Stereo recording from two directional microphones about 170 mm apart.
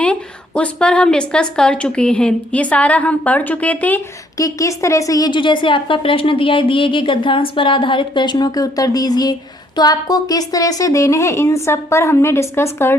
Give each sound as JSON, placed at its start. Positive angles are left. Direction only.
{"t": 0.0, "sound": "a woman's voice", "side_deg": 5}